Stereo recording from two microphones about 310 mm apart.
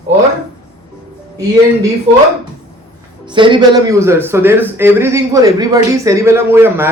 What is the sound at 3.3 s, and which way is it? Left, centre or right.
A man's voice, centre.